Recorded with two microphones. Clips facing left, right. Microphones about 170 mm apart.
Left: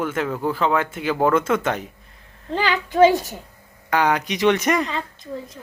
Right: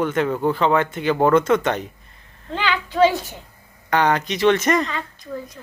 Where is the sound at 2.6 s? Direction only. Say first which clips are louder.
Left 2 dB; 40° left (ahead or behind).